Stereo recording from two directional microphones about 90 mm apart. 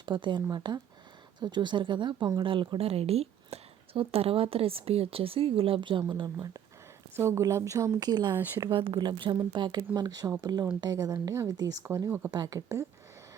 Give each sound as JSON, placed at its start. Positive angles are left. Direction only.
{"t": 0.0, "sound": "a woman's voice", "side_deg": -60}
{"t": 7.2, "sound": "a woman's voice", "side_deg": -30}
{"t": 8.7, "sound": "a woman's voice", "side_deg": -65}
{"t": 12.0, "sound": "speech", "side_deg": -25}
{"t": 12.3, "sound": "a woman's voice", "side_deg": -45}